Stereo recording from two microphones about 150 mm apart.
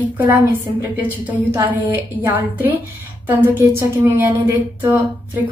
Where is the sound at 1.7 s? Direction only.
15° right (ahead or behind).